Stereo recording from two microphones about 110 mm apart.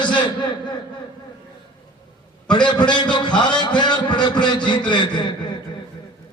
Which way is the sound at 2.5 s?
45° left (ahead or behind).